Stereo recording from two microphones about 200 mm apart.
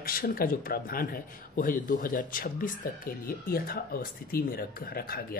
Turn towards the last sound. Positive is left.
turn(degrees=50)  # may be behind; listen again after turning